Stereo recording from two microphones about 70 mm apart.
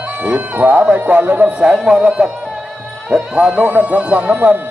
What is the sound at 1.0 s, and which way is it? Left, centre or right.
Speech, right.